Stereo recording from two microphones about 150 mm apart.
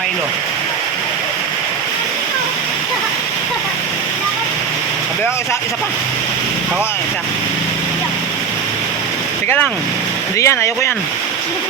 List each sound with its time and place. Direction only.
10.3 s speech: 20° left (ahead or behind)